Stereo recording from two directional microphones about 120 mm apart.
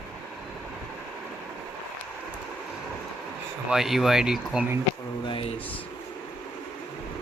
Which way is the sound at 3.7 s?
5° right (ahead or behind).